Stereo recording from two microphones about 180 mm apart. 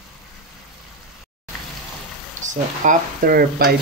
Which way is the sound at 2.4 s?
45° right (ahead or behind).